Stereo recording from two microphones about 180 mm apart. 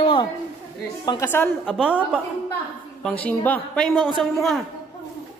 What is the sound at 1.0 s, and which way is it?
Speech, 15° left (ahead or behind).